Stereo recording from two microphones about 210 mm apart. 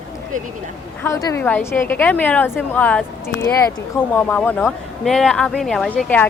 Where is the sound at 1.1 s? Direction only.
15° left (ahead or behind).